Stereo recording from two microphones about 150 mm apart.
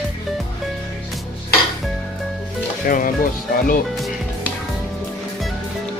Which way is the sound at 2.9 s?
65° left (ahead or behind).